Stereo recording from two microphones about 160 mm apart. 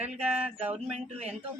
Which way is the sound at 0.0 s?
10° right (ahead or behind).